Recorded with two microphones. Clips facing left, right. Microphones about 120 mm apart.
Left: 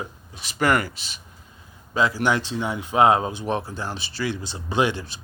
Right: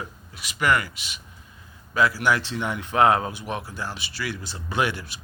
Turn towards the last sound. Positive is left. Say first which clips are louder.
# left 3 dB
turn(degrees=25)  # may be behind; listen again after turning